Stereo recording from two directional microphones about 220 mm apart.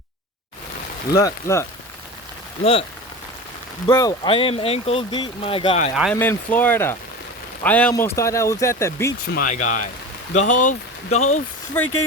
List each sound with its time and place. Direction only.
1.1 s speech: 15° left (ahead or behind)
3.8 s speech: 20° left (ahead or behind)
5.9 s speech: centre (ahead or behind)
9.3 s speech: 35° left (ahead or behind)
11.8 s speech: 10° left (ahead or behind)